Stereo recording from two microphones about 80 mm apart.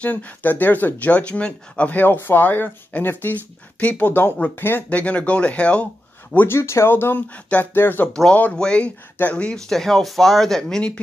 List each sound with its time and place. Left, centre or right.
0.0 s speech: left
4.8 s speech: centre
6.3 s speech: left
8.1 s speech: centre